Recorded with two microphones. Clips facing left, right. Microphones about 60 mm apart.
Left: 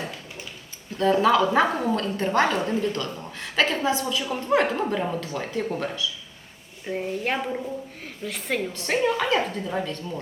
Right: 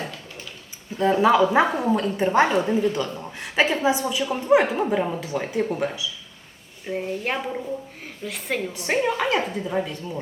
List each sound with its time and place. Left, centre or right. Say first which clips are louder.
0.9 s a woman's voice: right 2 dB; centre
8.7 s a woman's voice: right 1 dB; centre